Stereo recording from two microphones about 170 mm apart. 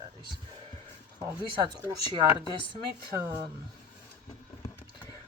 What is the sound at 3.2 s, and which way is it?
Speech, 10° right (ahead or behind).